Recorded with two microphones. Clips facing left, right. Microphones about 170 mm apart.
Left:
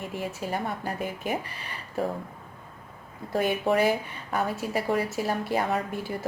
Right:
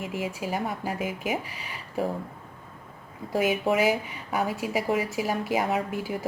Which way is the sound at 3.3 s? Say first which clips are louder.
Even; 5° right (ahead or behind).